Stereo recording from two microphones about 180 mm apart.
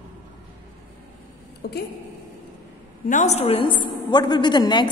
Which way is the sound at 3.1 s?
40° left (ahead or behind).